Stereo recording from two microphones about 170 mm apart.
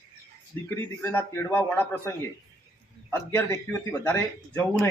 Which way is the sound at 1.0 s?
15° left (ahead or behind).